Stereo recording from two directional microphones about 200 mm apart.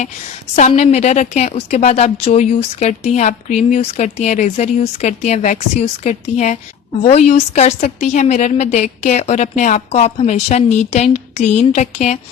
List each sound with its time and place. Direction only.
0.8 s a woman's voice: 35° left (ahead or behind)